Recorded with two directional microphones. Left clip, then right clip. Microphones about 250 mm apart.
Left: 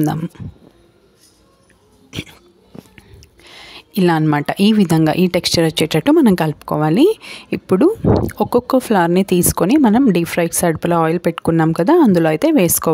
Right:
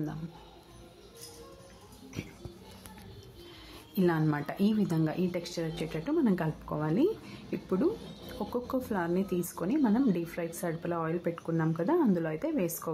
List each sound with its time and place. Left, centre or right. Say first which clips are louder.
3.9 s a woman's voice: left 14 dB; left